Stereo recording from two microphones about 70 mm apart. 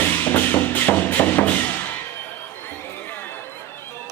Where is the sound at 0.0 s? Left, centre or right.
Left.